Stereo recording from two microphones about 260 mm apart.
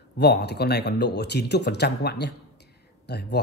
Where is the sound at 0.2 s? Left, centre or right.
Left.